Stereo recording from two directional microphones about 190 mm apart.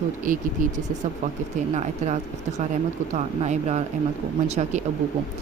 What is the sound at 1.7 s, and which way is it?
Speech, 35° right (ahead or behind).